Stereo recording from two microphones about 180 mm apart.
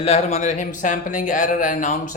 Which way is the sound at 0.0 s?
35° left (ahead or behind).